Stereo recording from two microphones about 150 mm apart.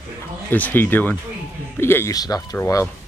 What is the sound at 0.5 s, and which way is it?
Speech, 10° left (ahead or behind).